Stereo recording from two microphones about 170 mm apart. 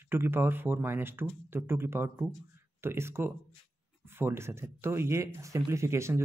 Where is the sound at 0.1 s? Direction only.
15° right (ahead or behind).